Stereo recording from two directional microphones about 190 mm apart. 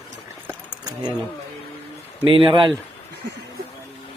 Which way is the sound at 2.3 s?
25° right (ahead or behind).